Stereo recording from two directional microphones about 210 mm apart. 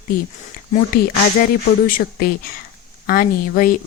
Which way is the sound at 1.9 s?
45° left (ahead or behind).